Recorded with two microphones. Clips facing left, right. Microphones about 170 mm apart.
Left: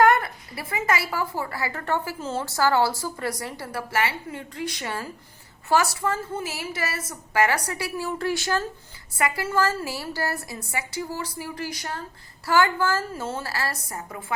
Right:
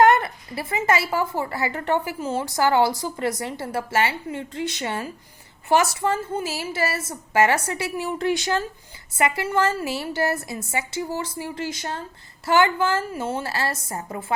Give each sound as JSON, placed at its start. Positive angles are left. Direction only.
{"t": 0.0, "sound": "a woman's voice", "side_deg": -25}